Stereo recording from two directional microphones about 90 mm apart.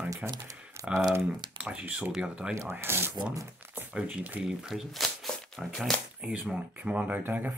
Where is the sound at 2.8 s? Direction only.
25° right (ahead or behind).